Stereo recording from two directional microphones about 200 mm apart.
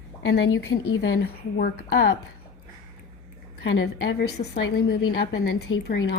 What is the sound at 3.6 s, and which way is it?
Speech, 60° left (ahead or behind).